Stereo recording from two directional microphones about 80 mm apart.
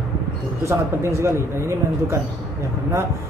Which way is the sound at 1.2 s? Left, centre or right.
Right.